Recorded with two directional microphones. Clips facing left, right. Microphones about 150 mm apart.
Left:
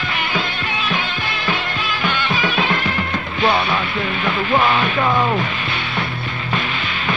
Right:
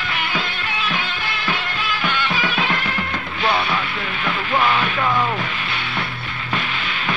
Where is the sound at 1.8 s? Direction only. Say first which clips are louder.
Even; 25° left (ahead or behind).